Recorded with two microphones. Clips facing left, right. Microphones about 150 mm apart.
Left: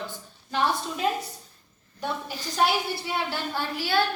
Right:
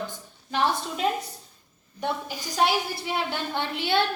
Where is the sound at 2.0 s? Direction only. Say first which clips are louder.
Right 2 dB; 15° right (ahead or behind).